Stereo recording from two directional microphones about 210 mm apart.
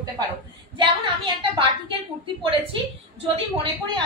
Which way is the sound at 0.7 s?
25° right (ahead or behind).